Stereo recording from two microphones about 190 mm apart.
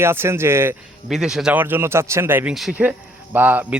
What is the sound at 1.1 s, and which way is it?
Speech, centre (ahead or behind).